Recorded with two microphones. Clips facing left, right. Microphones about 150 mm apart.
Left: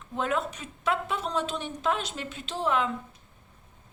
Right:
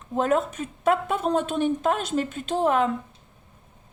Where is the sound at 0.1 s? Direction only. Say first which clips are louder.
Right 6 dB; 45° right (ahead or behind).